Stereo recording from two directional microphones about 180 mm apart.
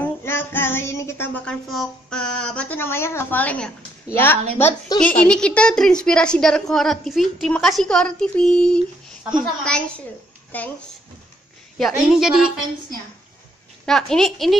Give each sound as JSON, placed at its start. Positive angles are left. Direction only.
{"t": 0.0, "sound": "music", "side_deg": 10}
{"t": 4.9, "sound": "a woman's voice", "side_deg": 20}
{"t": 5.2, "sound": "a woman's voice", "side_deg": 5}
{"t": 11.8, "sound": "a woman's voice", "side_deg": 0}
{"t": 13.8, "sound": "a woman's voice", "side_deg": 5}